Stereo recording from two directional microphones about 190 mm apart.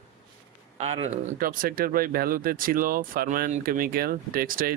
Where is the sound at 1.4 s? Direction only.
50° right (ahead or behind).